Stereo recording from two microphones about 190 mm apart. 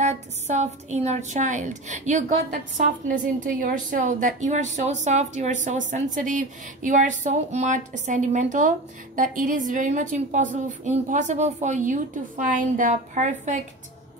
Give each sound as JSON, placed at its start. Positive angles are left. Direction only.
{"t": 0.0, "sound": "a woman's voice", "side_deg": -35}